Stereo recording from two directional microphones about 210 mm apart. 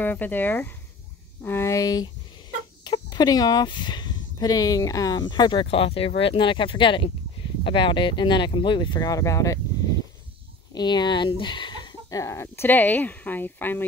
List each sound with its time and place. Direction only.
0.0 s speech: 10° left (ahead or behind)
10.7 s speech: 20° left (ahead or behind)